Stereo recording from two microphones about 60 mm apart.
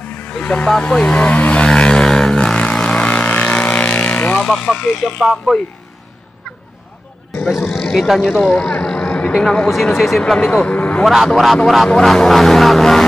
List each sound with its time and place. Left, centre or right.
0.3 s speech: left
1.7 s vehicle: centre
4.4 s speech: centre
5.2 s speech: centre
8.0 s speech: centre
8.5 s vehicle: centre
9.3 s speech: centre
11.2 s speech: centre